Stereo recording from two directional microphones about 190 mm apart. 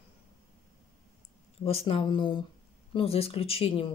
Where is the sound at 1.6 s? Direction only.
30° left (ahead or behind).